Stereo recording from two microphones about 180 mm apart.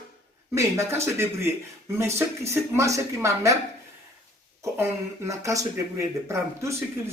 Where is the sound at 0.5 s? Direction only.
15° right (ahead or behind).